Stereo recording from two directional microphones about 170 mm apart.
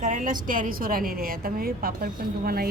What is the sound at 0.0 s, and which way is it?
A woman's voice, 50° right (ahead or behind).